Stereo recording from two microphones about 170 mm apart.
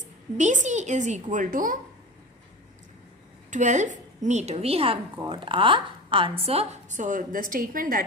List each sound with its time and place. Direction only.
0.3 s a woman's voice: 45° right (ahead or behind)
3.5 s a woman's voice: 45° right (ahead or behind)